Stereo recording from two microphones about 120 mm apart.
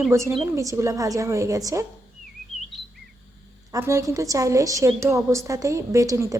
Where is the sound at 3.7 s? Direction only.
25° right (ahead or behind).